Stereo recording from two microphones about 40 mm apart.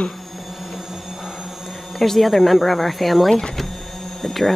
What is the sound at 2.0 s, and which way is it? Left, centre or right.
Speech, centre.